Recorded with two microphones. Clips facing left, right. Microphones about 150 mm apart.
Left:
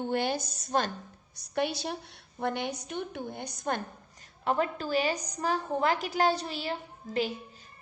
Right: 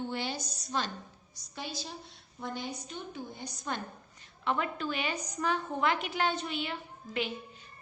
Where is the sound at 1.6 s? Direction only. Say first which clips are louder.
Left 10 dB; 65° left (ahead or behind).